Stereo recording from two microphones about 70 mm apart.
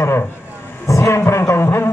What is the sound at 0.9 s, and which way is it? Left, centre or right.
Speech, left.